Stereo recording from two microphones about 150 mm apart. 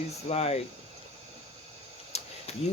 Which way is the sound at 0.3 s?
45° left (ahead or behind).